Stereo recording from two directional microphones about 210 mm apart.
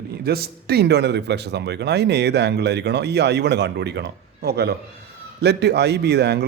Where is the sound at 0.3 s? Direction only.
50° right (ahead or behind).